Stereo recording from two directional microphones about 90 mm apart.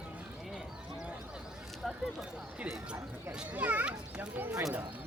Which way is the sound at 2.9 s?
15° right (ahead or behind).